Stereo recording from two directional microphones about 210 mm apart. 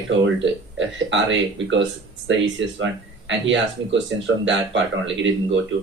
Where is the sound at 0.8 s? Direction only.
60° right (ahead or behind).